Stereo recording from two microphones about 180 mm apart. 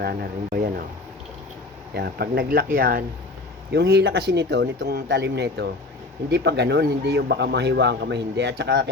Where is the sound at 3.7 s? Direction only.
65° right (ahead or behind).